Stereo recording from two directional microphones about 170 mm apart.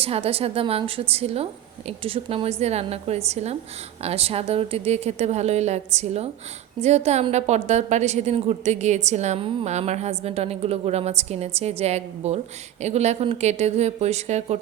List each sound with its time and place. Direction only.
0.0 s a woman's voice: 35° right (ahead or behind)